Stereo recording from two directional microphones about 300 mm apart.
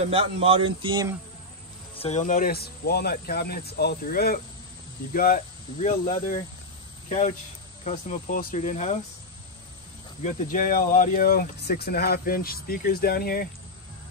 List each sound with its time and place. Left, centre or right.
0.1 s a man's voice: centre
2.0 s speech: left
10.2 s speech: left